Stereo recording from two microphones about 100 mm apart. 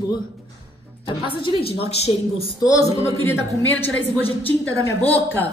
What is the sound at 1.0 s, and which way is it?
A woman's voice, 60° left (ahead or behind).